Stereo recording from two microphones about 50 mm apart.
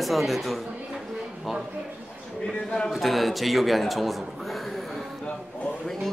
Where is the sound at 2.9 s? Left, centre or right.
Centre.